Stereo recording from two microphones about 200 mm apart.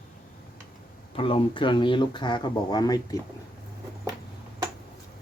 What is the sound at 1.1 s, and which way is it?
Speech, 30° left (ahead or behind).